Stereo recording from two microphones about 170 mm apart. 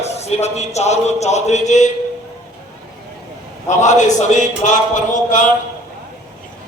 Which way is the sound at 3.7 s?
45° left (ahead or behind).